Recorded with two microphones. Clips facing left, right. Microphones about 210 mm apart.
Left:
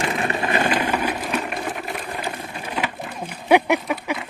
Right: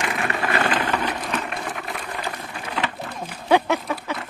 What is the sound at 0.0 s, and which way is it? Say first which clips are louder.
Vehicle: left 2 dB; 25° left (ahead or behind).